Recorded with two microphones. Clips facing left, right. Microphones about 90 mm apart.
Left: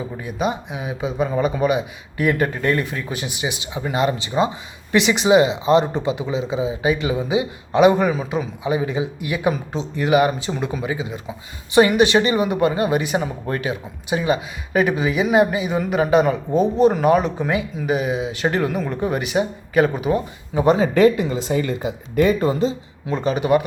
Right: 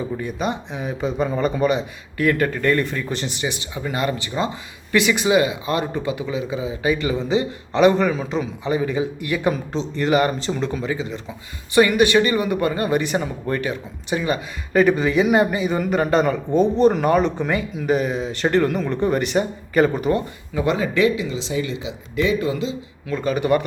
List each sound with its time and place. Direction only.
0.2 s a man's voice: 10° left (ahead or behind)
20.5 s speech: 30° left (ahead or behind)
20.9 s speech: 50° left (ahead or behind)
23.0 s a man's voice: 25° left (ahead or behind)